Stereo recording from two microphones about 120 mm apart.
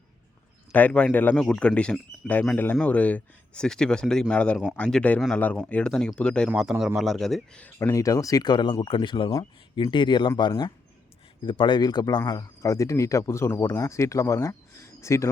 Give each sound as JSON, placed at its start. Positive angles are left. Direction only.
{"t": 0.7, "sound": "a man's voice", "side_deg": 10}
{"t": 7.8, "sound": "speech", "side_deg": 25}